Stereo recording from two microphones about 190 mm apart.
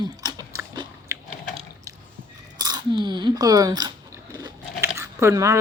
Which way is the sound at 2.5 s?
20° right (ahead or behind).